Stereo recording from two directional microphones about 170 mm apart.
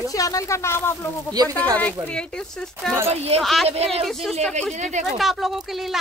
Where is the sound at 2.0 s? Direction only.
5° left (ahead or behind).